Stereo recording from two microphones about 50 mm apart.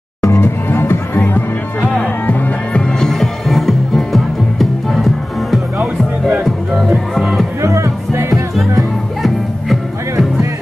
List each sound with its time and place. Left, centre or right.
0.4 s music: left
2.7 s music: centre
7.6 s music: right